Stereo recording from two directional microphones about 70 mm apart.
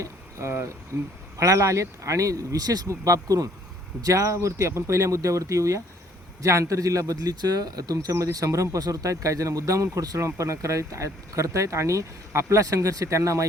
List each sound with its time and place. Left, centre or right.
0.0 s a sound: right
1.4 s speech: right
2.9 s speech: right